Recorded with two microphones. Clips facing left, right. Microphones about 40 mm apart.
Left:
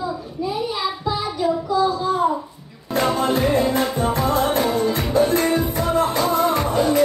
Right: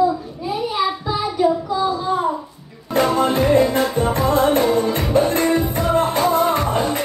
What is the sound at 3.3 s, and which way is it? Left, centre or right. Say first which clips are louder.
Music: right 3 dB; right.